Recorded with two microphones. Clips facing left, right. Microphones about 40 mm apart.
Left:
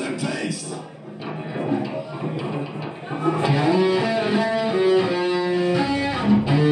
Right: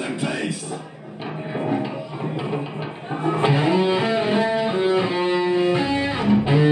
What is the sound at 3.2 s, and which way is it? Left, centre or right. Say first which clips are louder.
Music: even; right.